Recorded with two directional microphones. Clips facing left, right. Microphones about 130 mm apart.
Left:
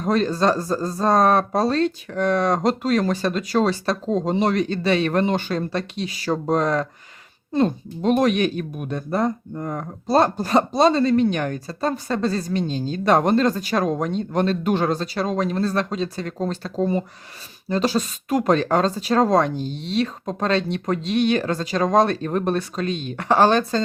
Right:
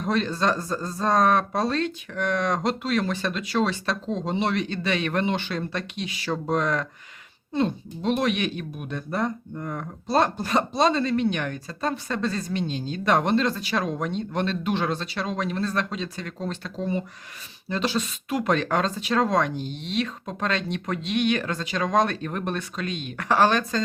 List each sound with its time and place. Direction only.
0.0 s speech: 40° left (ahead or behind)